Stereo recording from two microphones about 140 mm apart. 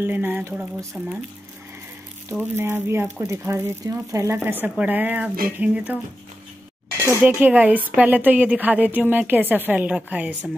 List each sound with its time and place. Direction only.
0.0 s a woman's voice: 15° right (ahead or behind)
0.6 s speech: centre (ahead or behind)
2.5 s a woman's voice: 20° right (ahead or behind)
7.2 s a woman's voice: 10° right (ahead or behind)